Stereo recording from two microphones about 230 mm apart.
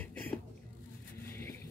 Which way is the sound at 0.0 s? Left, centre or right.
Centre.